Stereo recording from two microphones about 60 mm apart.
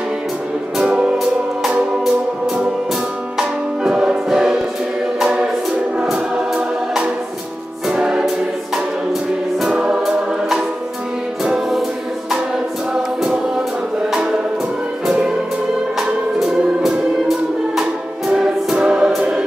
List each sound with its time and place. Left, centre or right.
0.8 s music: centre
3.3 s music: centre
7.9 s choir: centre
9.8 s music: centre
12.9 s music: centre
16.3 s music: centre
18.3 s music: centre